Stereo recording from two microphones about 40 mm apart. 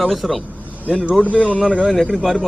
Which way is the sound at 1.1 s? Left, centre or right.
Right.